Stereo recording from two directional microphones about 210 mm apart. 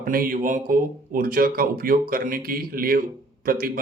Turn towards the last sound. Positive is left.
turn(degrees=-45)  # may be behind; listen again after turning